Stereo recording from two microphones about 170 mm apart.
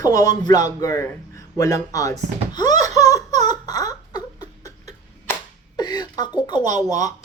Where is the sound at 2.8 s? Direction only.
20° left (ahead or behind).